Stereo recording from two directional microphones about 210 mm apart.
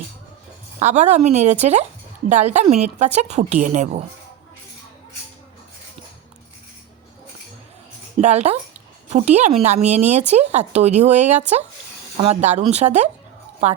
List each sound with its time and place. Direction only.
0.8 s speech: 35° right (ahead or behind)
8.2 s speech: 30° right (ahead or behind)